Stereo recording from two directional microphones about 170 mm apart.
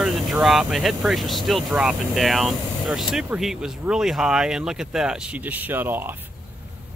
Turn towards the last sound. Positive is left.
turn(degrees=-10)  # may be behind; listen again after turning